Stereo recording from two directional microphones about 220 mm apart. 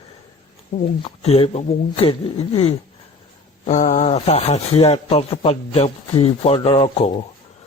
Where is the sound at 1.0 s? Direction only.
25° left (ahead or behind).